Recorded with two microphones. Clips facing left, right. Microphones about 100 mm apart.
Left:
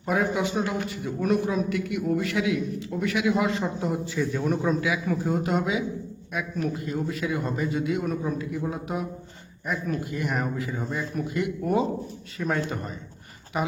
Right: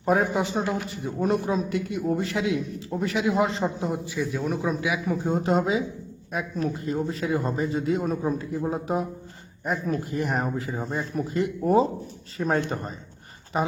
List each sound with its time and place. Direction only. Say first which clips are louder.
0.0 s a man's voice: right 2 dB; 40° right (ahead or behind)
3.9 s a man's voice: left 1 dB; 15° right (ahead or behind)
4.8 s a man's voice: even; 20° right (ahead or behind)